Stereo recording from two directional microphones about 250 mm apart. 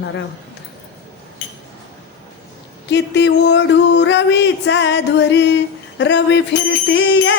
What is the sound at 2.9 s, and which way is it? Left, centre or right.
Music, left.